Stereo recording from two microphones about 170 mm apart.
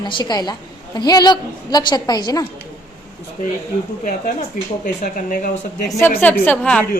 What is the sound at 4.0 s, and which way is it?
Speech, 50° left (ahead or behind).